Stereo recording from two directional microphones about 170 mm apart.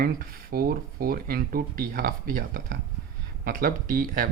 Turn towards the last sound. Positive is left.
turn(degrees=-55)  # may be behind; listen again after turning